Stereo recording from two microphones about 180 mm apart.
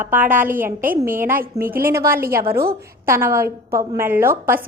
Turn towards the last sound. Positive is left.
turn(degrees=-10)  # may be behind; listen again after turning